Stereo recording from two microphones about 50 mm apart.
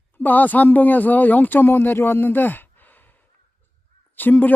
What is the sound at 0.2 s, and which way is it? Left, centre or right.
Speech, left.